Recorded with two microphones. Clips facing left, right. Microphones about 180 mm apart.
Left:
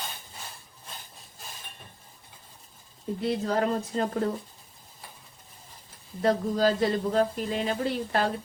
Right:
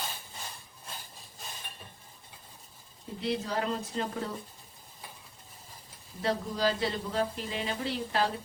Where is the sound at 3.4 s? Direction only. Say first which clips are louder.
Left 6 dB; 50° left (ahead or behind).